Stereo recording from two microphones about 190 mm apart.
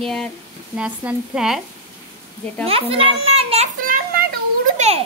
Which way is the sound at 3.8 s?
45° right (ahead or behind).